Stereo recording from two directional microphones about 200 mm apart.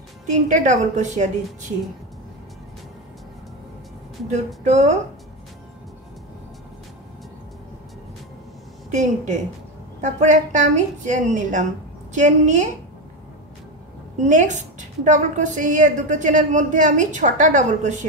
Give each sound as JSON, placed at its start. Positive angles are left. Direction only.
{"t": 0.3, "sound": "a woman's voice", "side_deg": -40}
{"t": 4.6, "sound": "a woman's voice", "side_deg": -35}
{"t": 8.9, "sound": "a woman's voice", "side_deg": -35}
{"t": 14.2, "sound": "a woman's voice", "side_deg": -35}